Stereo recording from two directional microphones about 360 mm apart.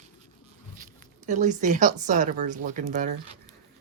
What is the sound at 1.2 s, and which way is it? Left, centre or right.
Speech, right.